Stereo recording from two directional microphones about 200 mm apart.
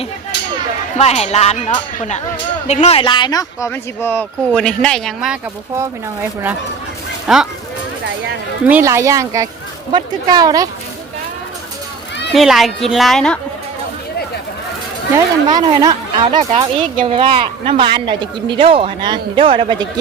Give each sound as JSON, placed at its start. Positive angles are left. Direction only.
{"t": 0.9, "sound": "speech", "side_deg": 35}
{"t": 7.3, "sound": "speech", "side_deg": 0}
{"t": 8.6, "sound": "speech", "side_deg": -10}
{"t": 12.3, "sound": "speech", "side_deg": 0}
{"t": 15.4, "sound": "speech", "side_deg": -20}